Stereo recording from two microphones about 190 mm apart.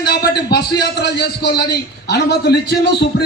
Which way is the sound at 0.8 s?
60° left (ahead or behind).